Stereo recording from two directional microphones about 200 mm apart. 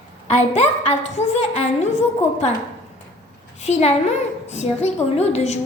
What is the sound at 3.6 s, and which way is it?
A woman's voice, 35° left (ahead or behind).